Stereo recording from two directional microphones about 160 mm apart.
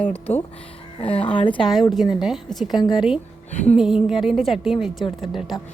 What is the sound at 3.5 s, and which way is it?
Speech, 45° left (ahead or behind).